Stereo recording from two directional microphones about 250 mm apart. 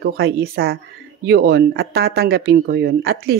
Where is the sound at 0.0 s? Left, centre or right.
Right.